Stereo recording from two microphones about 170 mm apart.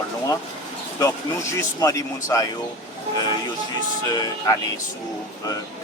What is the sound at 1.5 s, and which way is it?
Speech, 20° left (ahead or behind).